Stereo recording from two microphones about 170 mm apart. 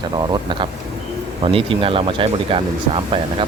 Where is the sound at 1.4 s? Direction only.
30° right (ahead or behind).